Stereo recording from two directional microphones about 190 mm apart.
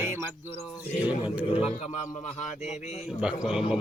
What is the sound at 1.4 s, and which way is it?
Speech, 30° left (ahead or behind).